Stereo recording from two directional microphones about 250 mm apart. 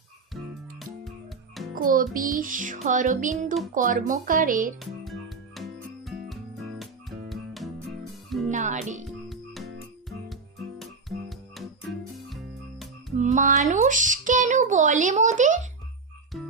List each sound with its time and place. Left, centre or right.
1.8 s music: right
4.8 s music: centre
8.4 s a child's voice: right
9.6 s music: centre
11.3 s music: centre
13.1 s speech: right
16.3 s music: centre